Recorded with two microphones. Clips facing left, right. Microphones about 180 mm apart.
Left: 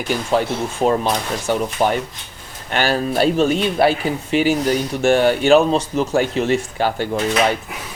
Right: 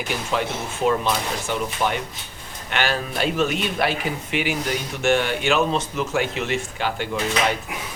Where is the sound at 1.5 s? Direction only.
40° left (ahead or behind).